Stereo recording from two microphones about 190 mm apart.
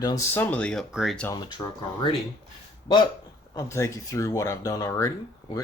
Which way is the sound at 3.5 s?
15° left (ahead or behind).